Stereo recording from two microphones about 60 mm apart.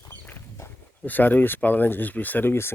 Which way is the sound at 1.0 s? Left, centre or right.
Left.